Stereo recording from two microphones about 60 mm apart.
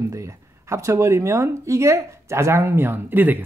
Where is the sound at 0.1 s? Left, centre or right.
Right.